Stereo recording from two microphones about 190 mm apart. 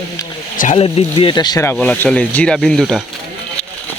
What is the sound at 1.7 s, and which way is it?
Speech, 5° left (ahead or behind).